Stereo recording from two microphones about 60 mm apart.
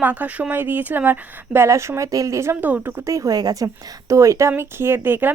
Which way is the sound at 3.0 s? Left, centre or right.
Right.